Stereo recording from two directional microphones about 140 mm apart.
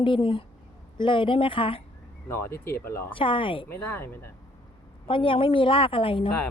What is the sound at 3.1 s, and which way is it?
Speech, 35° left (ahead or behind).